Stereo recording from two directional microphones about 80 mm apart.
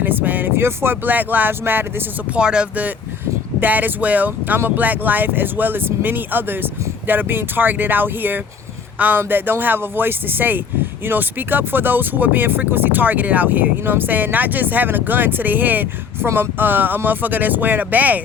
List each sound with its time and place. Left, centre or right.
0.0 s speech: right
2.3 s speech: centre